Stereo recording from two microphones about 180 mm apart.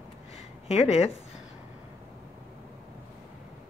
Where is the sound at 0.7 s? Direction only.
35° left (ahead or behind).